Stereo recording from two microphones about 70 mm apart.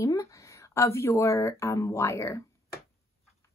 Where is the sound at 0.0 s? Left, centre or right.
Left.